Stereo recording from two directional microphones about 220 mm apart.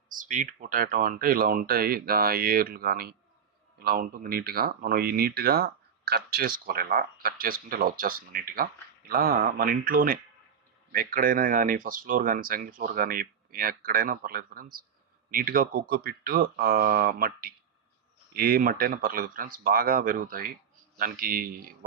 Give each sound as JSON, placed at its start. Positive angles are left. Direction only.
{"t": 0.1, "sound": "speech", "side_deg": -35}